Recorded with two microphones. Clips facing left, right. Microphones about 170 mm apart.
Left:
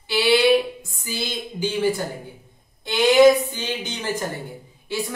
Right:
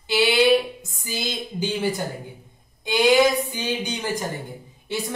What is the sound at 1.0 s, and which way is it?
Speech, 15° right (ahead or behind).